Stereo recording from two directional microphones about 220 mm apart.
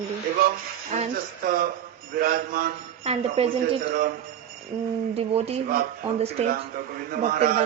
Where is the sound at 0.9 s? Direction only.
35° right (ahead or behind).